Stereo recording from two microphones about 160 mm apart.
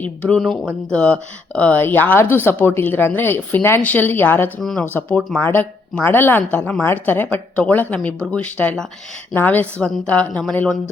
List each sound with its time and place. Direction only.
0.0 s a woman's voice: 5° left (ahead or behind)